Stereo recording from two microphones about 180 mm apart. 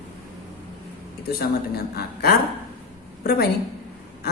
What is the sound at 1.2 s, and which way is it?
Speech, 60° left (ahead or behind).